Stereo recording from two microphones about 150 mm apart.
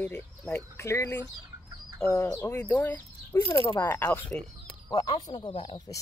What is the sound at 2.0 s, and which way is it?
Speech, 15° left (ahead or behind).